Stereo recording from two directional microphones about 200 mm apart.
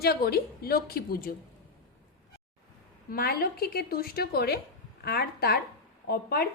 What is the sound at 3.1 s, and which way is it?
A woman's voice, 50° left (ahead or behind).